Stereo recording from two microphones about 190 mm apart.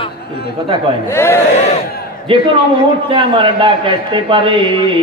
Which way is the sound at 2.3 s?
25° right (ahead or behind).